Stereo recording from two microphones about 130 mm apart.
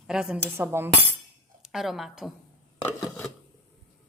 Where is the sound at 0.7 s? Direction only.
20° right (ahead or behind).